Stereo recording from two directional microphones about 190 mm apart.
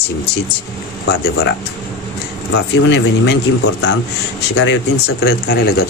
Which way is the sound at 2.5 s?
70° left (ahead or behind).